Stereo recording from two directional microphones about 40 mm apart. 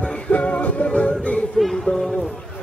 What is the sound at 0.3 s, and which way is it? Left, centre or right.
Music, left.